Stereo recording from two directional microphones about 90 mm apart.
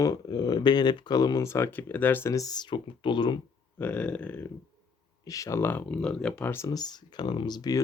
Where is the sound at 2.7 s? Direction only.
65° left (ahead or behind).